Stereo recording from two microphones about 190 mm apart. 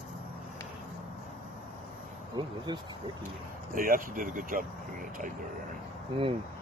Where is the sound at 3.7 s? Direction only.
50° right (ahead or behind).